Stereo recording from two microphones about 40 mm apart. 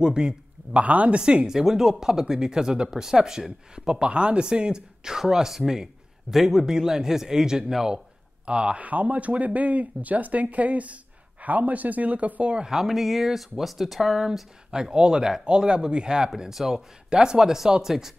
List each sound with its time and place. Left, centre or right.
0.0 s speech: centre
0.8 s speech: right
1.1 s speech: right
1.5 s speech: centre
8.5 s speech: right
8.7 s speech: right
12.5 s speech: centre
14.7 s speech: right